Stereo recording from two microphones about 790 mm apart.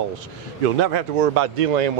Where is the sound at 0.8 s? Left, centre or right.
Right.